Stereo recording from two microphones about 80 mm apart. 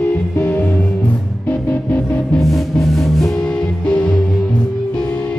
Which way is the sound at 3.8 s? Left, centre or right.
Centre.